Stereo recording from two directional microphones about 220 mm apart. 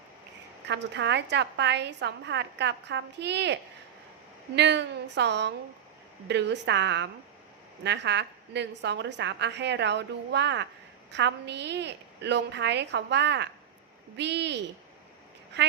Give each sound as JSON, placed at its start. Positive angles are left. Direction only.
{"t": 0.7, "sound": "a woman's voice", "side_deg": -50}